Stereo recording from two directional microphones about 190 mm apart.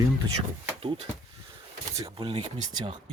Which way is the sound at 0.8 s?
30° right (ahead or behind).